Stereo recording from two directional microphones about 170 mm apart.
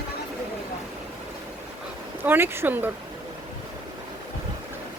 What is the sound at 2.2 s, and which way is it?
Speech, 10° right (ahead or behind).